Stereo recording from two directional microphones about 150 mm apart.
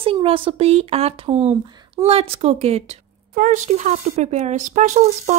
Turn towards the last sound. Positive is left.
turn(degrees=-55)  # may be behind; listen again after turning